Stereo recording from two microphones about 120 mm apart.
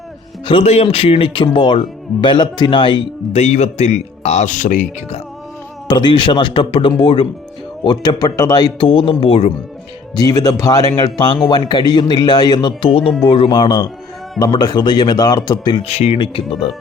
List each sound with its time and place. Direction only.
0.4 s speech: 50° left (ahead or behind)
3.3 s speech: 70° left (ahead or behind)
5.9 s speech: 45° left (ahead or behind)
7.9 s speech: 35° left (ahead or behind)
8.8 s speech: 45° left (ahead or behind)
10.2 s speech: 30° left (ahead or behind)
12.8 s speech: 50° left (ahead or behind)
15.8 s speech: 60° left (ahead or behind)
16.1 s speech: 45° left (ahead or behind)